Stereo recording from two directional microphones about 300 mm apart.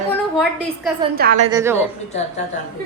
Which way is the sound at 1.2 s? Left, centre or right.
Right.